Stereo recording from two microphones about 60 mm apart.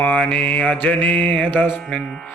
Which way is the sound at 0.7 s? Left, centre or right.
Left.